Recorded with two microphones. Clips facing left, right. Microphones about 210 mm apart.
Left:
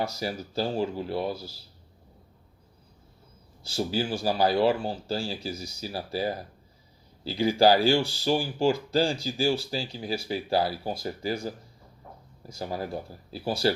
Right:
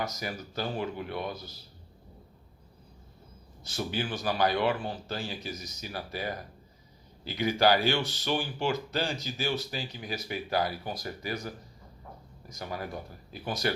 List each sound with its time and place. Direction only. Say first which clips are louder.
0.0 s speech: left 4 dB; 30° left (ahead or behind)
3.7 s speech: left 5 dB; 30° left (ahead or behind)